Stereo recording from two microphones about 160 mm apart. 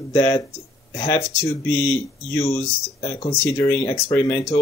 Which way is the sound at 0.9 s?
20° left (ahead or behind).